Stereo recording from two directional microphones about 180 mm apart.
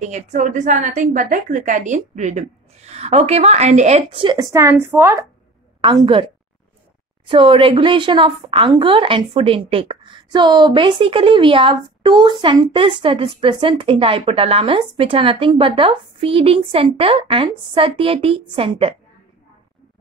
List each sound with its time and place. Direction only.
0.0 s a woman's voice: 40° right (ahead or behind); by 5.2 s 15° right (ahead or behind)
5.8 s a woman's voice: 25° right (ahead or behind)